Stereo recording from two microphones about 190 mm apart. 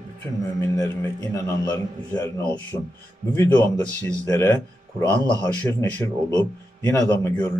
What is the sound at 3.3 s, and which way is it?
A man's voice, 10° left (ahead or behind).